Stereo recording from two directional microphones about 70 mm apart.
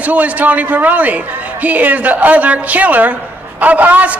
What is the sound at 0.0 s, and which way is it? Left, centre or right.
A man's voice, right.